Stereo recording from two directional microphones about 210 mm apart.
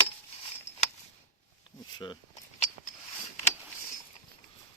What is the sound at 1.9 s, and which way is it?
Speech, 20° left (ahead or behind).